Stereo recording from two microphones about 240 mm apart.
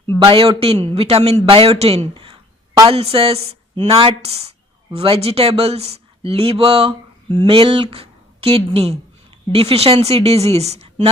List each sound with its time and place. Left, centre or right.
0.2 s a man's voice: right